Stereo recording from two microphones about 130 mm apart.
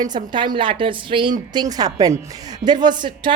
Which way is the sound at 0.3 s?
35° right (ahead or behind).